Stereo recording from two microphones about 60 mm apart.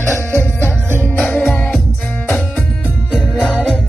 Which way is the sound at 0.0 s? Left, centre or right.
Right.